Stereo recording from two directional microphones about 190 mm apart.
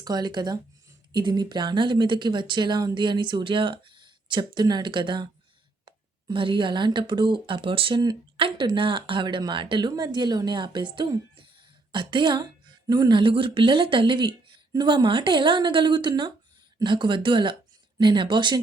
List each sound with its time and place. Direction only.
0.0 s speech: 20° right (ahead or behind)